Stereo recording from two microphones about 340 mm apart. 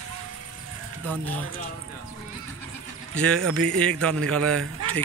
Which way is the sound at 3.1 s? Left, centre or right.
Centre.